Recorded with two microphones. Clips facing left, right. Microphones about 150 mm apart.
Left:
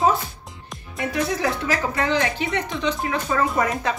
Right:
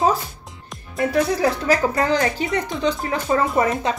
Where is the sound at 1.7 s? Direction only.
40° right (ahead or behind).